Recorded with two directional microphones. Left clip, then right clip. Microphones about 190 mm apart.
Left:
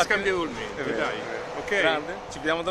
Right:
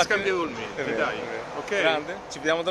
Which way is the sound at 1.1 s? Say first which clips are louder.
Even; 50° left (ahead or behind).